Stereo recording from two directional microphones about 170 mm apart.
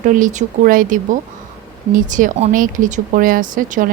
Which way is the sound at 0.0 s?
50° right (ahead or behind).